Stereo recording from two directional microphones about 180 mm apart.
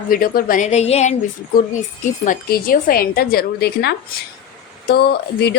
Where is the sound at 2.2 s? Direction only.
50° left (ahead or behind).